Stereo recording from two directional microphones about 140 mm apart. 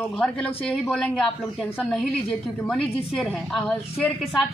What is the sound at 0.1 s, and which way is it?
Speech, 10° left (ahead or behind).